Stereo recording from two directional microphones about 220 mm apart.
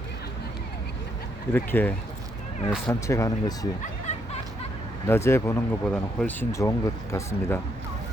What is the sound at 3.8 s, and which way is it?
Music, 30° left (ahead or behind).